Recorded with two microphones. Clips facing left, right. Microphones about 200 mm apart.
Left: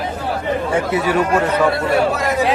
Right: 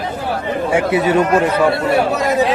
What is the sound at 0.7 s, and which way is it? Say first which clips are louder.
Speech: right 5 dB; 15° right (ahead or behind).